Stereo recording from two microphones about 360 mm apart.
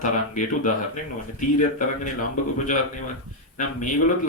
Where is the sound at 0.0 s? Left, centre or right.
Left.